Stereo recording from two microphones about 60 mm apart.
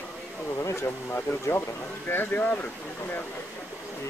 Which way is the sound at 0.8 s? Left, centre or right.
Left.